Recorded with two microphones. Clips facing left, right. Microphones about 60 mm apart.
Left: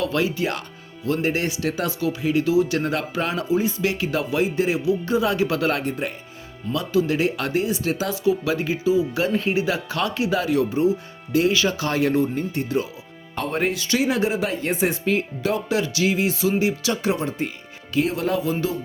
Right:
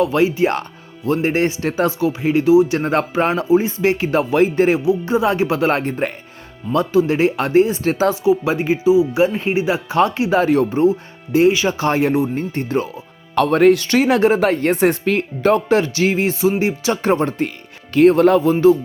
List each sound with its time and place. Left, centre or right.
0.0 s speech: right
4.9 s speech: right
6.7 s speech: right
8.1 s speech: right
11.3 s speech: right
12.3 s speech: right
13.3 s speech: right